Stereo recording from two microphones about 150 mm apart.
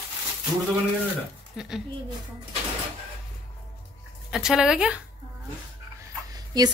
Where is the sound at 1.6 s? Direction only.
5° right (ahead or behind).